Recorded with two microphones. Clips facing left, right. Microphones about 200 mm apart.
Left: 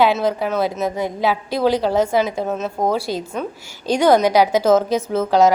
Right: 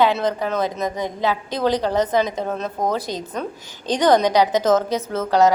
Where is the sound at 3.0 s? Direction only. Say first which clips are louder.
Left 4 dB; 20° right (ahead or behind).